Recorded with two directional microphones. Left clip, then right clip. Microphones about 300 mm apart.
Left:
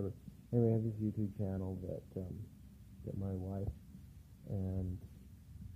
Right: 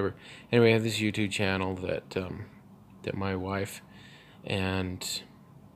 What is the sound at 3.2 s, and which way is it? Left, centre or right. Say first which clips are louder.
Speech: right 14 dB; right.